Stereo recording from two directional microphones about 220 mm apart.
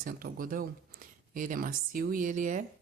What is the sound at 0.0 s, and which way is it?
Speech, 40° right (ahead or behind).